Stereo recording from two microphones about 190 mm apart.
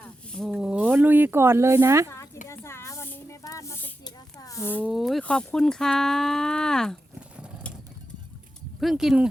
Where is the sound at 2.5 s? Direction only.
15° left (ahead or behind).